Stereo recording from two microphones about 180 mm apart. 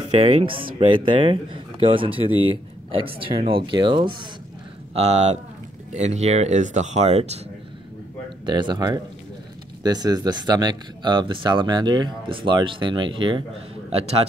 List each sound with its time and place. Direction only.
0.1 s speech: 35° right (ahead or behind)
4.9 s speech: 35° right (ahead or behind)
8.5 s a man's voice: 25° right (ahead or behind)